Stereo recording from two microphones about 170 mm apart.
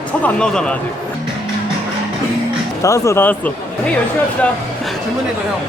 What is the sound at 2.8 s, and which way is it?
Speech, 20° left (ahead or behind).